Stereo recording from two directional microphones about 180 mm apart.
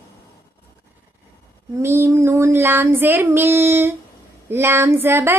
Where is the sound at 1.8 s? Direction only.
15° right (ahead or behind).